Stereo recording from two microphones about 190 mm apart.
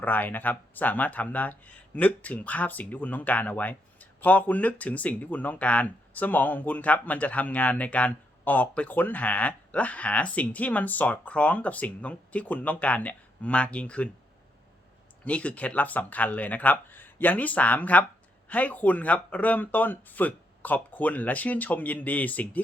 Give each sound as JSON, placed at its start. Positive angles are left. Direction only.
{"t": 0.0, "sound": "speech", "side_deg": 10}
{"t": 15.2, "sound": "speech", "side_deg": 5}